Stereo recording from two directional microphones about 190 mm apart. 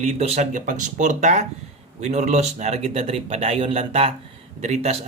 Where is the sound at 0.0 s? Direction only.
35° right (ahead or behind).